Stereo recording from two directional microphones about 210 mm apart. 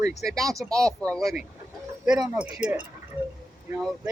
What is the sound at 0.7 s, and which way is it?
Speech, centre (ahead or behind).